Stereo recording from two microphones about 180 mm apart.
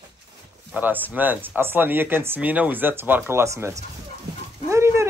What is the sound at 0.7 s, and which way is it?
Speech, 10° right (ahead or behind).